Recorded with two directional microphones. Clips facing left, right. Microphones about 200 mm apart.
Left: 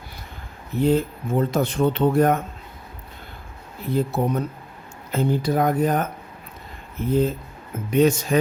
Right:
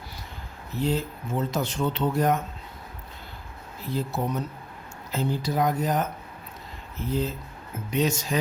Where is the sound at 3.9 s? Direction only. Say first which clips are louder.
Left 6 dB; 55° left (ahead or behind).